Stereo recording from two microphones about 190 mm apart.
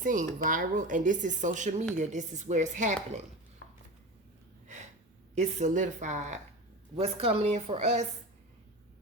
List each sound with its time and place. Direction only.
0.0 s speech: 45° right (ahead or behind)
4.6 s a sound: 40° right (ahead or behind)
5.3 s speech: 35° right (ahead or behind)